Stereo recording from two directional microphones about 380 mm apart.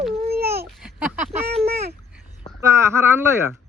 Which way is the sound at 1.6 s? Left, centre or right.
Right.